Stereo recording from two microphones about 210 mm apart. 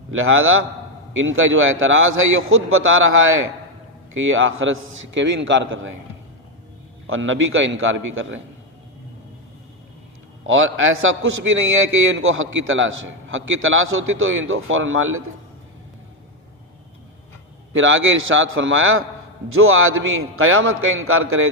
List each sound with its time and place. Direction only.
0.1 s a man's voice: 75° right (ahead or behind)
7.1 s a man's voice: 70° right (ahead or behind)
10.4 s a man's voice: 65° right (ahead or behind)
17.7 s a man's voice: 65° right (ahead or behind)